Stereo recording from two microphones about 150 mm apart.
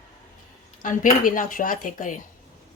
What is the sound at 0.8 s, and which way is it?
Speech, 60° left (ahead or behind).